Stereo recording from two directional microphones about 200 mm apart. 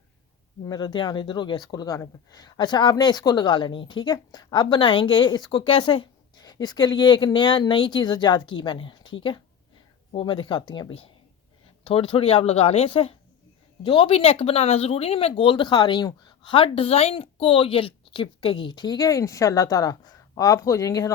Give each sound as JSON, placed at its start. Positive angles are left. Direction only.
{"t": 0.6, "sound": "speech", "side_deg": 20}